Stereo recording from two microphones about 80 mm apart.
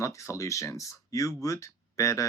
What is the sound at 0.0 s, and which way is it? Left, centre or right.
Speech, left.